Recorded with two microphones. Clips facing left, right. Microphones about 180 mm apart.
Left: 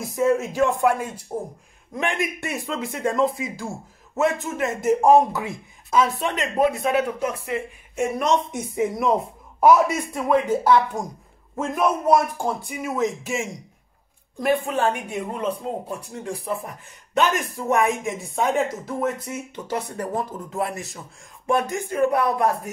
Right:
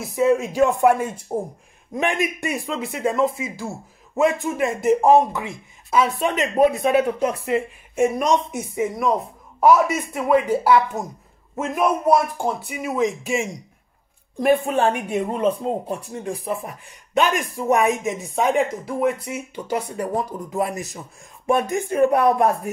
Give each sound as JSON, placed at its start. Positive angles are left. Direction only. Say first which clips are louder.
{"t": 0.0, "sound": "speech", "louder": "right 2 dB", "side_deg": -10}
{"t": 1.3, "sound": "speech", "louder": "right 4 dB", "side_deg": -35}
{"t": 2.0, "sound": "speech", "louder": "right 3 dB", "side_deg": -20}
{"t": 4.2, "sound": "speech", "louder": "right 3 dB", "side_deg": -15}
{"t": 15.9, "sound": "speech", "louder": "right 3 dB", "side_deg": -20}